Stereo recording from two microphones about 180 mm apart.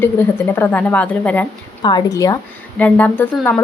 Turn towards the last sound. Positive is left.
turn(degrees=5)  # may be behind; listen again after turning